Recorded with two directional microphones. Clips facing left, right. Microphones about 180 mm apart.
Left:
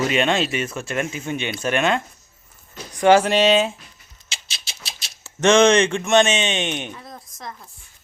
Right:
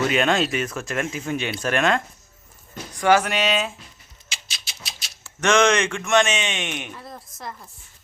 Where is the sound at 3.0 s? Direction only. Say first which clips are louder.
Left 5 dB; 30° left (ahead or behind).